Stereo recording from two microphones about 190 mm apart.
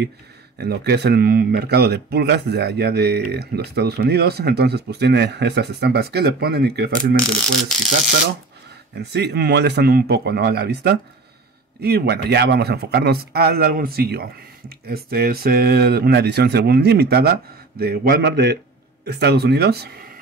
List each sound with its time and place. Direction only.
0.6 s speech: 60° right (ahead or behind)
8.9 s speech: 60° right (ahead or behind)